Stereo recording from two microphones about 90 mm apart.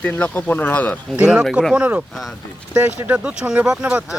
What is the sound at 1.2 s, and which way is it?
Speech, 15° right (ahead or behind).